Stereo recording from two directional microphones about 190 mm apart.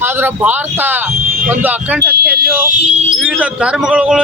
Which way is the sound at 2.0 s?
55° right (ahead or behind).